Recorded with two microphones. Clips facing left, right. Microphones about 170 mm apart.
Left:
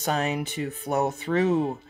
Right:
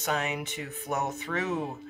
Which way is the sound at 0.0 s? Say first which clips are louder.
Left 4 dB; 35° left (ahead or behind).